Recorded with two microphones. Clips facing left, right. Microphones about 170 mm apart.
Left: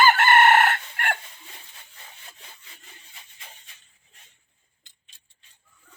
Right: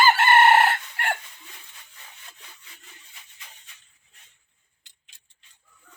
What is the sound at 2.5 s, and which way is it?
Sawing, 30° left (ahead or behind).